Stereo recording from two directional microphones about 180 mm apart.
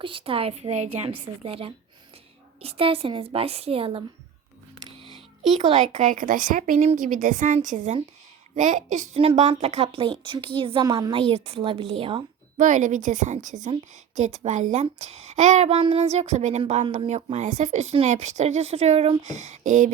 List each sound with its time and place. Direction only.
0.0 s speech: 30° right (ahead or behind)
5.5 s a woman's voice: 40° right (ahead or behind)
12.5 s speech: 45° right (ahead or behind)